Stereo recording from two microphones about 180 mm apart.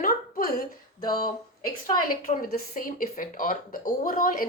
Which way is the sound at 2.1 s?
50° left (ahead or behind).